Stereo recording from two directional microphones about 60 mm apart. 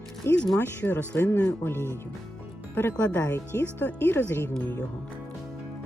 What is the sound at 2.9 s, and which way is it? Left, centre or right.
Speech, left.